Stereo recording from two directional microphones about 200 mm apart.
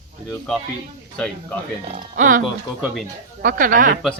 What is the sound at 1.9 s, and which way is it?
Speech, 40° right (ahead or behind).